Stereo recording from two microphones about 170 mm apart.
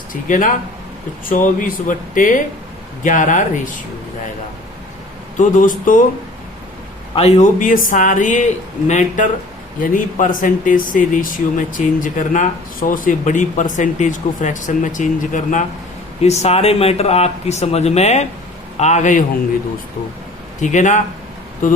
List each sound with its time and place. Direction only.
0.1 s speech: 50° left (ahead or behind)
5.4 s speech: 50° left (ahead or behind)
7.2 s speech: 40° left (ahead or behind)
20.6 s speech: 45° left (ahead or behind)